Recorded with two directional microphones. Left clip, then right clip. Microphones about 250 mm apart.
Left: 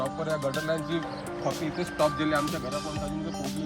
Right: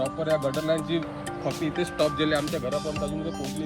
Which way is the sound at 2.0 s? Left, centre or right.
Centre.